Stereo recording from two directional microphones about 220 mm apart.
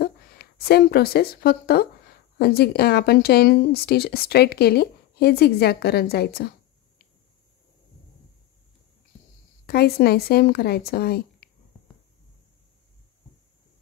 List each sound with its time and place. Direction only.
0.0 s speech: 45° left (ahead or behind)
9.7 s speech: 45° left (ahead or behind)